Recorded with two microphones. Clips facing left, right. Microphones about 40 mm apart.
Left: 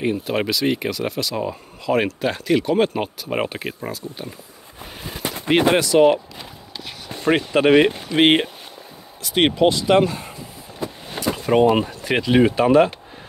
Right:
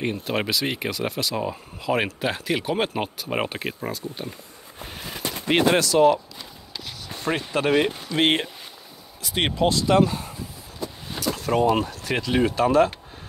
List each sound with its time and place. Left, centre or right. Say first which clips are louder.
0.0 s speech: left 4 dB; centre
5.3 s gunshot: left 3 dB; centre
5.7 s speech: left 3 dB; left
7.3 s speech: left 7 dB; left
8.1 s speech: left 4 dB; left
9.3 s speech: left 6 dB; centre
9.8 s speech: left 3 dB; left